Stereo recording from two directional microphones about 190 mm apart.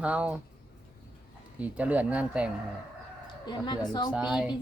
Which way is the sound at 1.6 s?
5° right (ahead or behind).